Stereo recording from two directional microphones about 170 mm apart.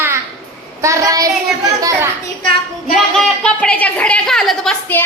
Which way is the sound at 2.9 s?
5° left (ahead or behind).